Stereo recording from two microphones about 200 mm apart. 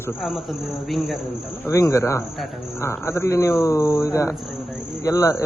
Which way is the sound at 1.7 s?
15° left (ahead or behind).